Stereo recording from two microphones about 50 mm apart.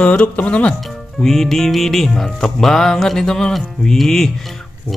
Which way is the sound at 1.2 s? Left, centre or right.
Centre.